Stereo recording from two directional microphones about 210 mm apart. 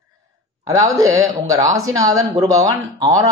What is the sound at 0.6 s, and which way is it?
Speech, 15° right (ahead or behind).